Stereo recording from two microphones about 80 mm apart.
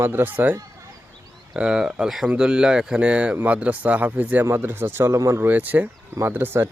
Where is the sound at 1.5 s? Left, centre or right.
Centre; by 5.4 s right.